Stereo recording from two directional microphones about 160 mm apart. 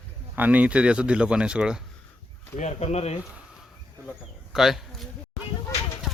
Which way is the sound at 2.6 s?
45° left (ahead or behind).